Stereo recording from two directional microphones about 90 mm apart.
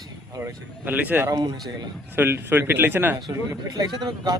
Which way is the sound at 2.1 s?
25° right (ahead or behind).